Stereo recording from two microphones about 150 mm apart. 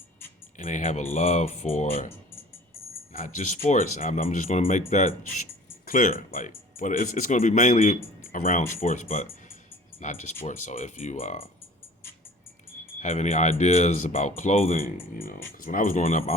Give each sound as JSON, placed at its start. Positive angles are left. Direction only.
{"t": 0.6, "sound": "speech", "side_deg": 60}
{"t": 3.1, "sound": "speech", "side_deg": 60}
{"t": 4.6, "sound": "speech", "side_deg": 50}
{"t": 5.8, "sound": "speech", "side_deg": 65}
{"t": 8.2, "sound": "speech", "side_deg": 65}
{"t": 9.0, "sound": "speech", "side_deg": 40}
{"t": 10.0, "sound": "speech", "side_deg": 55}
{"t": 13.0, "sound": "speech", "side_deg": 50}
{"t": 14.7, "sound": "speech", "side_deg": 65}